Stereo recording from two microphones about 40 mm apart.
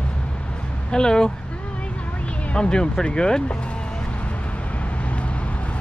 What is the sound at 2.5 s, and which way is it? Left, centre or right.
Speech, left.